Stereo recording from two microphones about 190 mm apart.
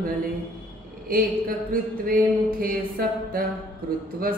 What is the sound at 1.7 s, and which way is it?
Mantra, 50° right (ahead or behind).